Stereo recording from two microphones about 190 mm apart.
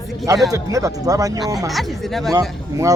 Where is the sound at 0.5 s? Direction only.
20° right (ahead or behind).